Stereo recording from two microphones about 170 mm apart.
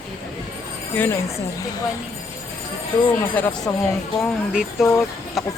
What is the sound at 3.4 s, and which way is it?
Speech, 10° left (ahead or behind).